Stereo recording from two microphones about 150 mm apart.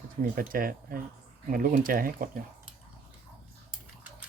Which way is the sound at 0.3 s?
70° right (ahead or behind).